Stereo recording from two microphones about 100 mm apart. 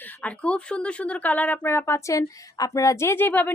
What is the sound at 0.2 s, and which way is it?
Speech, 15° left (ahead or behind).